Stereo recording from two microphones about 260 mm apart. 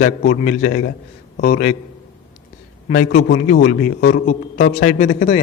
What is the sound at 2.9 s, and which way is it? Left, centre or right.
A man's voice, left.